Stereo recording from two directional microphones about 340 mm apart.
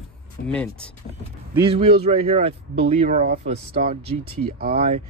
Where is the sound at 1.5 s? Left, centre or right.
Centre.